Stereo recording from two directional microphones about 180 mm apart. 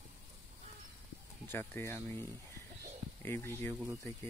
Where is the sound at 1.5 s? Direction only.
10° left (ahead or behind).